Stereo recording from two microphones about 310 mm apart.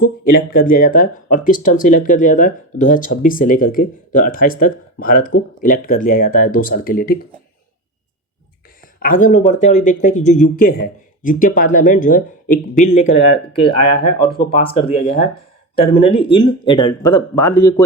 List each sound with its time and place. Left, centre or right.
0.0 s speech: left
9.0 s speech: left; by 17.8 s centre